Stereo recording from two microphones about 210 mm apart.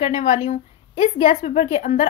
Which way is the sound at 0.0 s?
30° left (ahead or behind).